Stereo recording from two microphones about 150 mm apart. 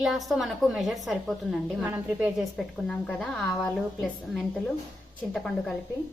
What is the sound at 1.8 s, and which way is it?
A woman's voice, 10° right (ahead or behind).